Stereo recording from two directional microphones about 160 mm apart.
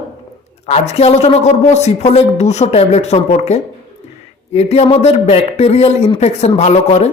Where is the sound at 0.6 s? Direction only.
40° left (ahead or behind).